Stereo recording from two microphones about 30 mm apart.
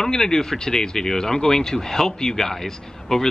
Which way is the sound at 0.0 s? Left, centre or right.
Centre.